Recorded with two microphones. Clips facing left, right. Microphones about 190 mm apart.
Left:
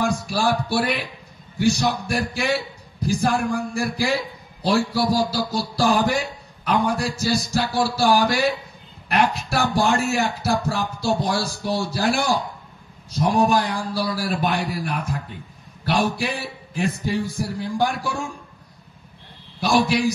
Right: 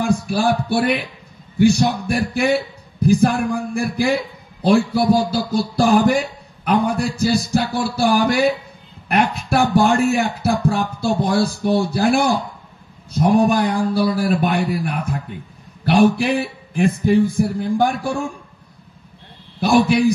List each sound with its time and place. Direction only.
0.0 s a man's voice: 55° right (ahead or behind)
19.6 s a man's voice: 55° right (ahead or behind)